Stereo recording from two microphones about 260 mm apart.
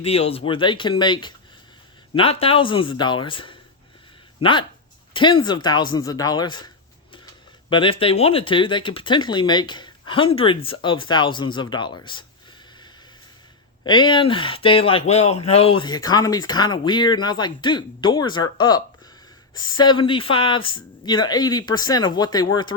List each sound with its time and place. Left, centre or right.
0.0 s speech: left
7.7 s speech: centre
13.8 s speech: centre